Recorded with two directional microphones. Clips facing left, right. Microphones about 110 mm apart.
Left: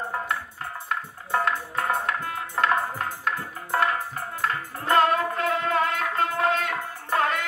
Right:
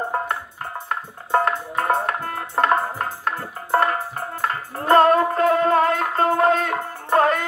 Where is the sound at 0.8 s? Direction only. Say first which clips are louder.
Right 2 dB; 45° right (ahead or behind).